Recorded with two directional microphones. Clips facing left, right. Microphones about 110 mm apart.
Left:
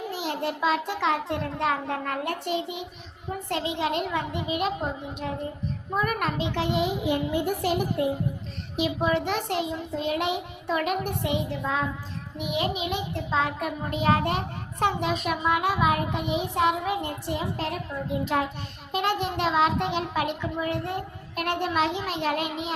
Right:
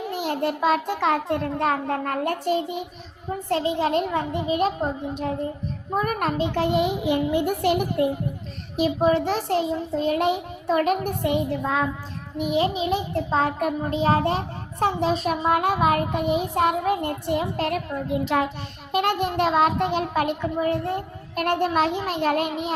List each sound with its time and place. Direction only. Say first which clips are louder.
0.1 s a child's voice: right 6 dB; 50° right (ahead or behind)
7.4 s a child's voice: right 4 dB; 60° right (ahead or behind)
8.8 s a child's voice: right 5 dB; 40° right (ahead or behind)
12.4 s a child's voice: right 6 dB; 35° right (ahead or behind)
13.9 s a child's voice: right 1 dB; 30° right (ahead or behind); by 17.7 s 60° right (ahead or behind)
18.3 s a child's voice: right 3 dB; 90° right; by 22.7 s 45° right (ahead or behind)